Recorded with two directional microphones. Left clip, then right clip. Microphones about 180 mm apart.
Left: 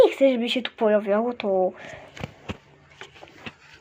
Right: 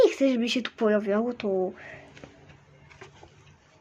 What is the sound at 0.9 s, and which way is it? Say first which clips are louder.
Speech: left 4 dB; 20° right (ahead or behind).